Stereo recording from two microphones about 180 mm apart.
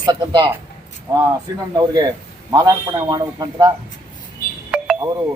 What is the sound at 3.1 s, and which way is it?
Speech, 20° right (ahead or behind).